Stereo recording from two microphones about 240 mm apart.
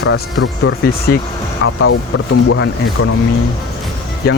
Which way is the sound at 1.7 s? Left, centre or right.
Left.